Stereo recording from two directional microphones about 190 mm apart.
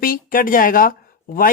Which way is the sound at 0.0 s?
45° left (ahead or behind).